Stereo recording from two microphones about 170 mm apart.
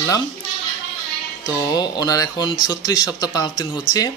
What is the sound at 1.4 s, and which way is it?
Speech, 25° left (ahead or behind).